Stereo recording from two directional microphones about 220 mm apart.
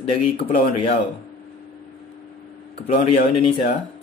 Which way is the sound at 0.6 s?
25° left (ahead or behind).